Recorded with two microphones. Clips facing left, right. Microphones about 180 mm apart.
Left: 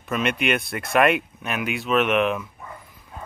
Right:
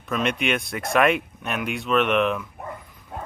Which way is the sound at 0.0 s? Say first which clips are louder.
Left 1 dB; centre (ahead or behind).